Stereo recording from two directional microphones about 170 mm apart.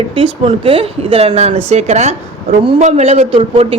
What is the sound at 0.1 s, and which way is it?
A woman's voice, 30° right (ahead or behind).